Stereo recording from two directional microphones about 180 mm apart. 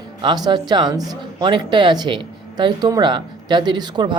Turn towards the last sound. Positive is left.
turn(degrees=-25)  # may be behind; listen again after turning